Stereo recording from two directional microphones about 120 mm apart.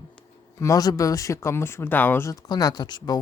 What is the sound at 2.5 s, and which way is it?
Speech, 30° left (ahead or behind).